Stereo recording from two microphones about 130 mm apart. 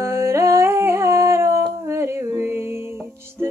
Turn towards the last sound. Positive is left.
turn(degrees=-20)  # may be behind; listen again after turning